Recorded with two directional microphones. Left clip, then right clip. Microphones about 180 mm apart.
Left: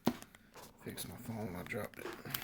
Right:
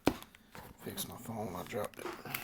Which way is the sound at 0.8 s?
45° left (ahead or behind).